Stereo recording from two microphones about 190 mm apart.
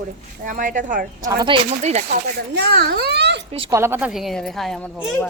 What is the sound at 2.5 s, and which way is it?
Speech, 60° right (ahead or behind).